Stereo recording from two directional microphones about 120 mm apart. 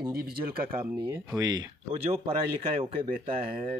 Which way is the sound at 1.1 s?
25° right (ahead or behind).